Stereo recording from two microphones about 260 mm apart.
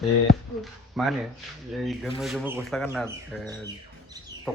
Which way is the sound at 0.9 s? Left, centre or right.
Centre.